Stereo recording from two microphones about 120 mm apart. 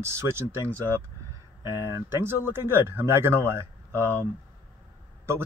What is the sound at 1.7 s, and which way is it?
Speech, 25° right (ahead or behind).